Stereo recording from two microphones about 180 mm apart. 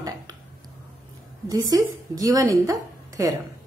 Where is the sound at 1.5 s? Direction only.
20° right (ahead or behind).